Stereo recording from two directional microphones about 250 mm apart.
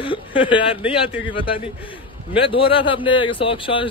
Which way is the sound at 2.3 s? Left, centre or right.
Left.